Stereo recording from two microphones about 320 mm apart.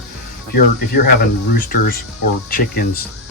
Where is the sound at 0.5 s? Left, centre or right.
Left.